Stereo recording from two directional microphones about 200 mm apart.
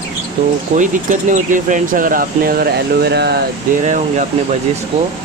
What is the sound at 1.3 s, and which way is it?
Speech, 40° right (ahead or behind).